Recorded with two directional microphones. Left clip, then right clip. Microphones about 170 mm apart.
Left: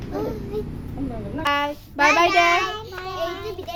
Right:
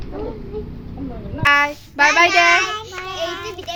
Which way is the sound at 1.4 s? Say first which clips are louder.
Right 8 dB; 5° left (ahead or behind).